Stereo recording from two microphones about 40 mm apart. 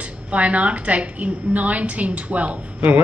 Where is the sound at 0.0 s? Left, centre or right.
Right.